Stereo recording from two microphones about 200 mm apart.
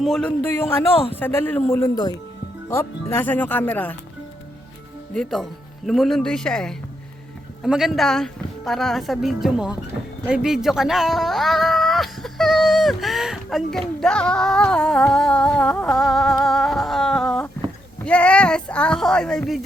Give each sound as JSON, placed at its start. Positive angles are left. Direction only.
{"t": 0.0, "sound": "speech", "side_deg": 5}
{"t": 5.1, "sound": "speech", "side_deg": 5}